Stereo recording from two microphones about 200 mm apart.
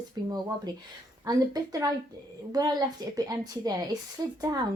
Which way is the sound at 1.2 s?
20° right (ahead or behind).